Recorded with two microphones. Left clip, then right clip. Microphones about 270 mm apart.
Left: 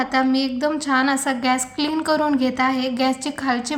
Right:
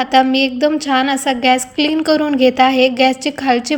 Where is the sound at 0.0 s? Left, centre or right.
Centre.